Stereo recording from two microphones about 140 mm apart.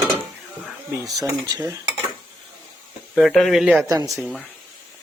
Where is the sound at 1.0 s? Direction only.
25° right (ahead or behind).